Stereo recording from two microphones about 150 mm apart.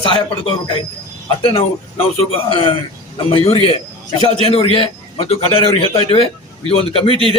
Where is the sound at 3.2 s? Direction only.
40° left (ahead or behind).